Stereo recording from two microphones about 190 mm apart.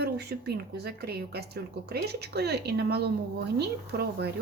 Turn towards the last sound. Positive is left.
turn(degrees=-60)  # may be behind; listen again after turning